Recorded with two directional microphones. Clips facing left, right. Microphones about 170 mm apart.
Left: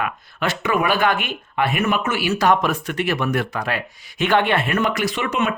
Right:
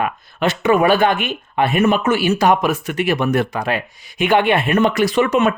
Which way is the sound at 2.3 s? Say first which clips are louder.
Right 3 dB; 15° right (ahead or behind).